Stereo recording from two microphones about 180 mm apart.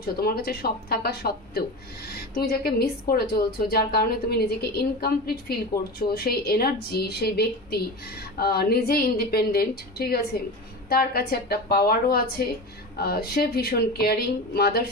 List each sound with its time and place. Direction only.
0.0 s speech: 60° left (ahead or behind)